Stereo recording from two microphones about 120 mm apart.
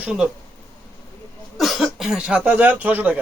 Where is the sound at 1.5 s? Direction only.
Centre (ahead or behind).